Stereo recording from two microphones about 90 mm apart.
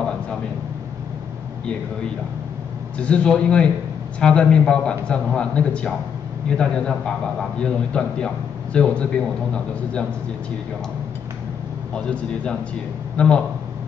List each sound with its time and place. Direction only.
3.0 s a man's voice: 10° left (ahead or behind)
11.9 s a man's voice: 10° left (ahead or behind)